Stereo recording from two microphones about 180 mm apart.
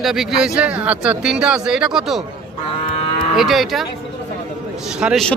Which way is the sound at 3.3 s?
Centre (ahead or behind).